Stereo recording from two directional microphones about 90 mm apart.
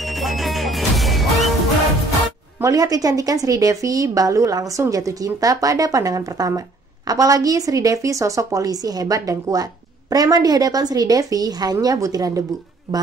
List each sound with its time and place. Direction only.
0.0 s music: centre (ahead or behind)
2.6 s a woman's voice: 45° right (ahead or behind)